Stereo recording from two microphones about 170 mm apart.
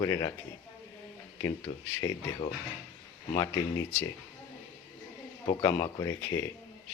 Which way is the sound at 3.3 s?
20° left (ahead or behind).